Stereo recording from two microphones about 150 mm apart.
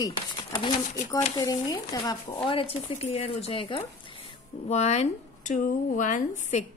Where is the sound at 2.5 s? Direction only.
40° left (ahead or behind).